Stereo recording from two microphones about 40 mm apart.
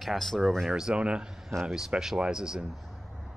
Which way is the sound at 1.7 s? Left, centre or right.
Centre.